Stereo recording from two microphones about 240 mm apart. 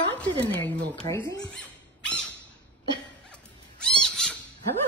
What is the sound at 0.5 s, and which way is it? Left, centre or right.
Speech, centre.